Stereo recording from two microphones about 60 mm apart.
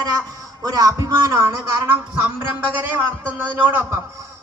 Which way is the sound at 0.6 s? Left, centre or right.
Right.